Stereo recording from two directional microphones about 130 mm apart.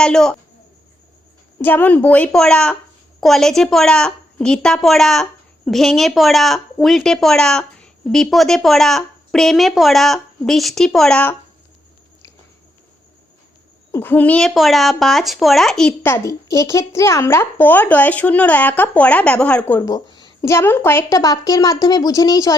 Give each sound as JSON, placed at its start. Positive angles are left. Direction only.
{"t": 0.0, "sound": "a woman's voice", "side_deg": 5}
{"t": 1.5, "sound": "a woman's voice", "side_deg": 15}
{"t": 13.9, "sound": "a woman's voice", "side_deg": 15}
{"t": 16.0, "sound": "speech", "side_deg": 20}
{"t": 19.8, "sound": "a sound", "side_deg": 30}
{"t": 20.5, "sound": "a woman's voice", "side_deg": 20}